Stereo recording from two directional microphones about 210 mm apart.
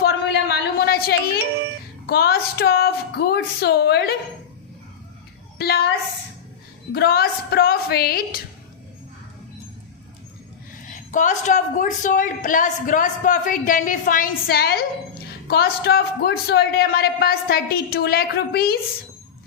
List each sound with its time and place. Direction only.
0.0 s a sound: 50° left (ahead or behind)
2.0 s a man's voice: 50° left (ahead or behind)
5.5 s a woman's voice: 50° left (ahead or behind)
6.9 s a man's voice: 45° left (ahead or behind)
10.8 s a woman's voice: 40° left (ahead or behind)